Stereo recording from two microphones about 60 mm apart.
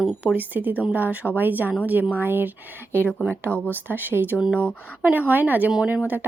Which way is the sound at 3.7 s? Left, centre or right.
Right.